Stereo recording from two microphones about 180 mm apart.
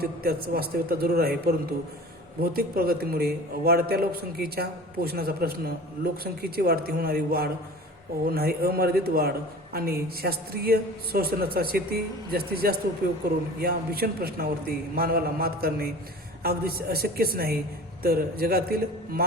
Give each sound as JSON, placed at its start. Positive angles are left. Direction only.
{"t": 0.0, "sound": "a man's voice", "side_deg": -60}